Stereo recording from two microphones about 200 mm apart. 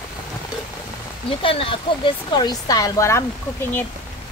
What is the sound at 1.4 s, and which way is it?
Speech, 25° left (ahead or behind).